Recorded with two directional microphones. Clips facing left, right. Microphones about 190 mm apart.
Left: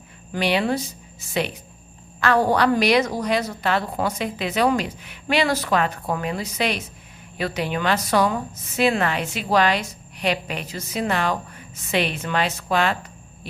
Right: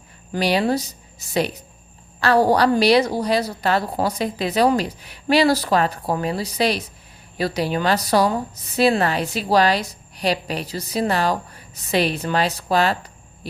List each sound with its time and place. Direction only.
0.3 s a woman's voice: 40° right (ahead or behind)